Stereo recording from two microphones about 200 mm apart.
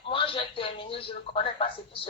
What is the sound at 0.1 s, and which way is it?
A woman's voice, 25° left (ahead or behind).